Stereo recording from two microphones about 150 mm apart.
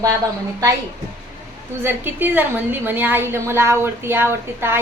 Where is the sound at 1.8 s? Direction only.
10° right (ahead or behind).